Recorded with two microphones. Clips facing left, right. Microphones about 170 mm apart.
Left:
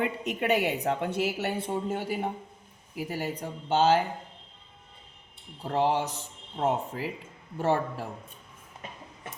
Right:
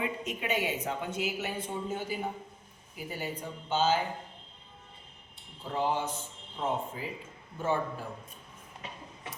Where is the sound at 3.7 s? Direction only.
65° left (ahead or behind).